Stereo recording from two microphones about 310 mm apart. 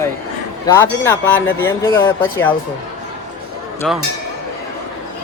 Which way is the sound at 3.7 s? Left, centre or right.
Centre.